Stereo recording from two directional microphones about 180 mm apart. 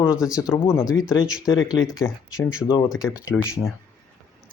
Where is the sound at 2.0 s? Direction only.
20° left (ahead or behind).